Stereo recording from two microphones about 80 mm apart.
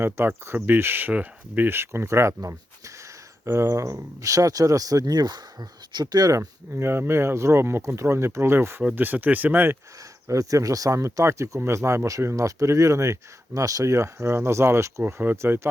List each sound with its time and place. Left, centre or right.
0.0 s speech: right
6.7 s speech: right
8.8 s speech: centre
10.2 s speech: right
15.0 s speech: right